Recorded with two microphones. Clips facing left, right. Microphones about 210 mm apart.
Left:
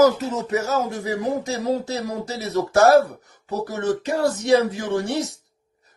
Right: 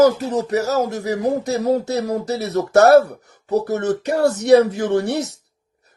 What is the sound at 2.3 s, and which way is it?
Speech, 60° right (ahead or behind).